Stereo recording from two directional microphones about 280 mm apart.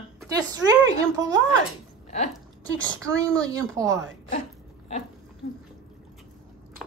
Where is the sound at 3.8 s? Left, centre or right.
Centre.